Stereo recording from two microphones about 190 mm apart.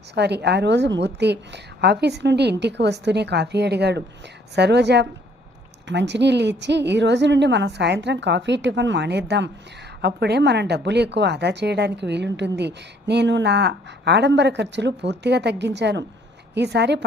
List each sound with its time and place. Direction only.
0.1 s speech: 60° right (ahead or behind)